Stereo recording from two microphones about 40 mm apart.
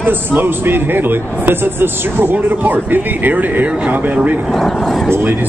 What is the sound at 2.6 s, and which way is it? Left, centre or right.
A man's voice, right.